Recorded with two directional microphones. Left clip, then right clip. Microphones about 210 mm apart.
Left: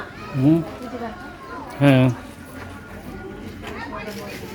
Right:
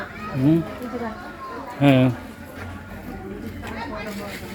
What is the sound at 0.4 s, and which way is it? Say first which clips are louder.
Speech: left 2 dB; 20° left (ahead or behind).